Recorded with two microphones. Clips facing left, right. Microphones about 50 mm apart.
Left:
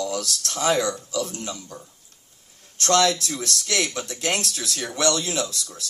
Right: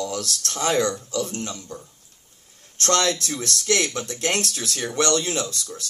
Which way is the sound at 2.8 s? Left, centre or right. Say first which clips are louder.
Left 2 dB; right.